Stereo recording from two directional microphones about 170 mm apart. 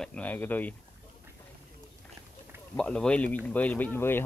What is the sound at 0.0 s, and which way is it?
Speech, 5° left (ahead or behind).